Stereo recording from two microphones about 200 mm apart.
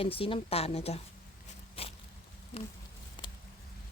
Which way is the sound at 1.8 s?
30° left (ahead or behind).